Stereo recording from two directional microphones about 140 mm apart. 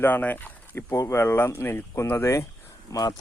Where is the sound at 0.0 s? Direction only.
10° left (ahead or behind).